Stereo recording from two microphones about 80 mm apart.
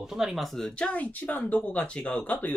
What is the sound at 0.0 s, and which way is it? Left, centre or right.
Speech, centre.